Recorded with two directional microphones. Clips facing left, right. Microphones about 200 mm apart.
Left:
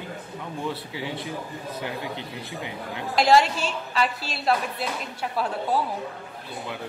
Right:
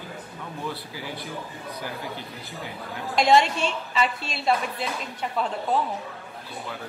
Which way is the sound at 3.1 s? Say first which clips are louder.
Even; centre (ahead or behind).